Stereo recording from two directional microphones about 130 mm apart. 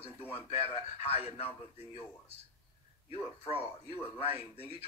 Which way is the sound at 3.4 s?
50° left (ahead or behind).